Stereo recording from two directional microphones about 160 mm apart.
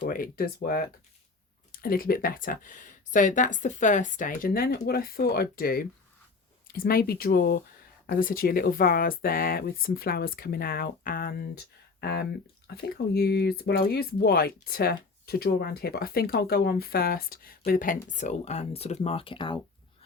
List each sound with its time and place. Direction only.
0.0 s speech: 65° left (ahead or behind)
8.0 s speech: 60° left (ahead or behind); by 19.5 s 30° left (ahead or behind)